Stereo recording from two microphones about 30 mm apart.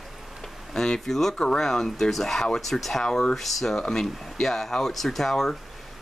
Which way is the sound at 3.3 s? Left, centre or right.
Centre.